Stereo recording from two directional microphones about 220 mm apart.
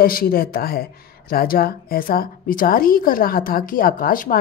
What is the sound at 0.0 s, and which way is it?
A woman's voice, 40° left (ahead or behind).